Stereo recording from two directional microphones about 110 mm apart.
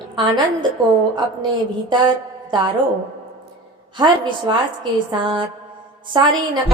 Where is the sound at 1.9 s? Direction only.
45° right (ahead or behind).